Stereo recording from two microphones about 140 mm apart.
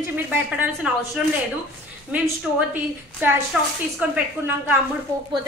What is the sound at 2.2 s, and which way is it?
A woman's voice, 10° right (ahead or behind).